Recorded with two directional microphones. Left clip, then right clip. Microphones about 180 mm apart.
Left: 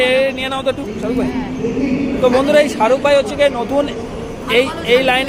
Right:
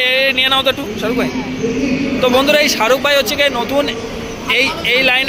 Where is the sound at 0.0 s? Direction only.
10° left (ahead or behind).